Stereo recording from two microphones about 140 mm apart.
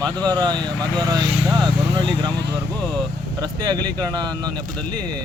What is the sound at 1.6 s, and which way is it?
Vehicle, 35° right (ahead or behind).